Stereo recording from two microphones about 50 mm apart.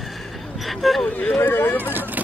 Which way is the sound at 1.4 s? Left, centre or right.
Left.